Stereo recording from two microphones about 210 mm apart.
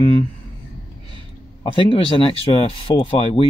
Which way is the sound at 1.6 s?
25° left (ahead or behind).